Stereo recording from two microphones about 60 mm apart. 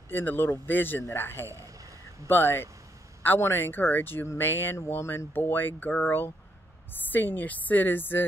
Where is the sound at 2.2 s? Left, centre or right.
Left.